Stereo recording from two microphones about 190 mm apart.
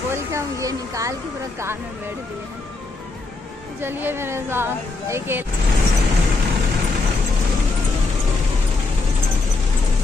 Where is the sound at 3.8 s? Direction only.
10° right (ahead or behind).